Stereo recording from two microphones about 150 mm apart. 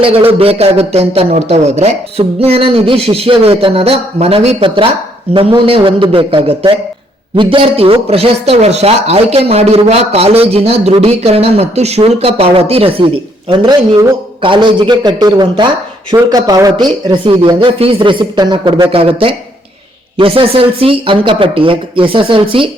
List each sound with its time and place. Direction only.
0.0 s a man's voice: 40° right (ahead or behind)